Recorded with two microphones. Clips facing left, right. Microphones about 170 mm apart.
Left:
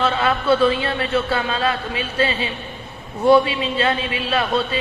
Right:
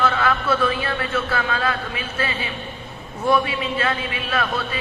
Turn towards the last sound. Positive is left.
turn(degrees=25)  # may be behind; listen again after turning